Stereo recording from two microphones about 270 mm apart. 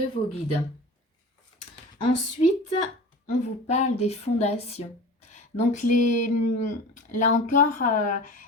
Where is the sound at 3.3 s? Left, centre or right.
Left.